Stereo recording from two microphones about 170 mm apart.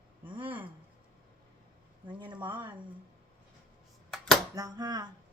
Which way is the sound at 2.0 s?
25° right (ahead or behind).